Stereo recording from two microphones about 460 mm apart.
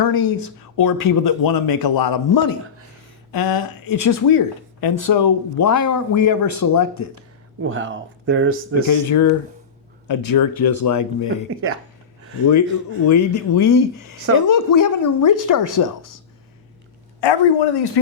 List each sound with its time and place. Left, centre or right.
0.0 s speech: left
7.6 s speech: right
8.7 s speech: left
13.1 s speech: left
17.2 s speech: left